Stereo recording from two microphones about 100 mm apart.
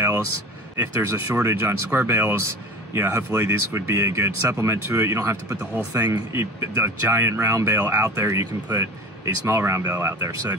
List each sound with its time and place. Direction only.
0.7 s speech: 30° right (ahead or behind)